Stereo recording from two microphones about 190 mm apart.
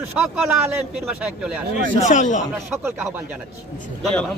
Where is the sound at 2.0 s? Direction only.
40° left (ahead or behind).